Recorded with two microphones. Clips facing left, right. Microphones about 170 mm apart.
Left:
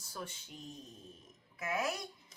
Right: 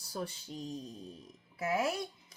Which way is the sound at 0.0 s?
35° right (ahead or behind).